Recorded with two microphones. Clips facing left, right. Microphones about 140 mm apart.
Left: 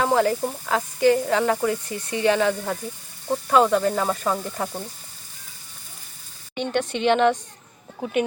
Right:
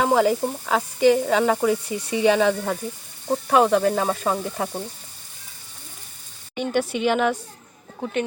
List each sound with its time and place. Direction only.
0.0 s sizzle: 15° right (ahead or behind)
6.6 s sizzle: 5° right (ahead or behind)